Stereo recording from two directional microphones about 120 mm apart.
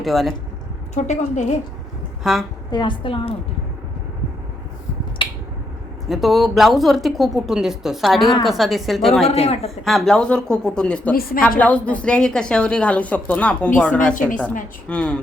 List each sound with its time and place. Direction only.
0.0 s speech: centre (ahead or behind)
0.9 s a woman's voice: 75° left (ahead or behind)
2.3 s speech: centre (ahead or behind)
2.6 s a woman's voice: 40° left (ahead or behind)
5.2 s finger snapping: 45° left (ahead or behind)
6.1 s speech: centre (ahead or behind)
9.3 s a man's voice: 60° left (ahead or behind)
9.8 s a woman's voice: centre (ahead or behind)